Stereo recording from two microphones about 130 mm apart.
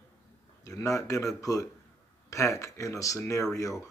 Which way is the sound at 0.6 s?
25° left (ahead or behind).